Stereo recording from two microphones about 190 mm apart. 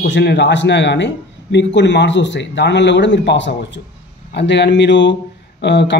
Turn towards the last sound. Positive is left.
turn(degrees=65)  # may be behind; listen again after turning